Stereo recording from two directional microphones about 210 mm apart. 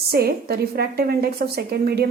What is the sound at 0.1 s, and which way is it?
A woman's voice, 45° right (ahead or behind).